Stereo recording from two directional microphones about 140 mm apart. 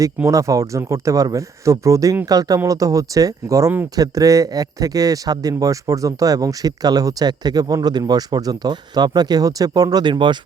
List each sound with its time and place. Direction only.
0.3 s speech: 25° right (ahead or behind)